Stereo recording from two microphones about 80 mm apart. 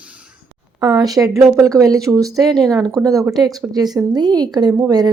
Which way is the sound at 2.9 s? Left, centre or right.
Right.